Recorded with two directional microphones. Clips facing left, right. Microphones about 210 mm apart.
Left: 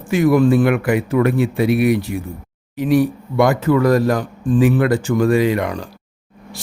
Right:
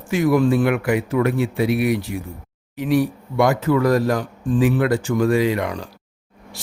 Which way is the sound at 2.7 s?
45° left (ahead or behind).